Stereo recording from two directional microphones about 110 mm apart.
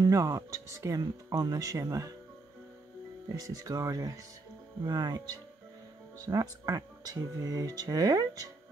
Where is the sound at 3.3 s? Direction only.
30° right (ahead or behind).